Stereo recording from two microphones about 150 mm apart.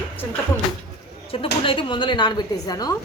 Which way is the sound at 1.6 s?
35° left (ahead or behind).